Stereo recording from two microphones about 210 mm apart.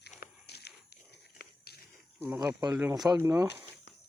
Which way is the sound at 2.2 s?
10° right (ahead or behind).